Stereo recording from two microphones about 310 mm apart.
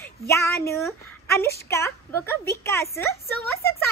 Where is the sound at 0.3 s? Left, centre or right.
Centre.